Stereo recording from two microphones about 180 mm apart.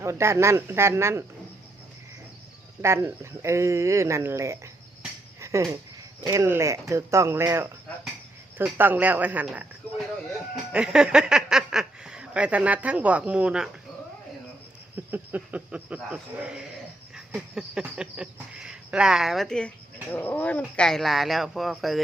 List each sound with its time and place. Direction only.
0.0 s speech: 15° right (ahead or behind)
2.8 s speech: 15° right (ahead or behind)
5.4 s a sound: 15° right (ahead or behind)
6.2 s speech: 15° right (ahead or behind)
14.9 s a sound: 10° right (ahead or behind)
16.0 s speech: 5° right (ahead or behind)